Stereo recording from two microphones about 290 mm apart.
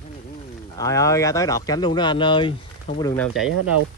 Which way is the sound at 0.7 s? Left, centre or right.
Centre.